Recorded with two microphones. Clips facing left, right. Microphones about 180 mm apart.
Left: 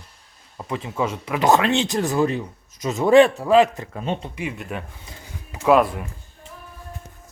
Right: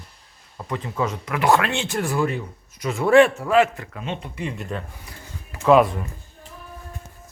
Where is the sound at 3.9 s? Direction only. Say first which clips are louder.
Left 4 dB; 35° left (ahead or behind).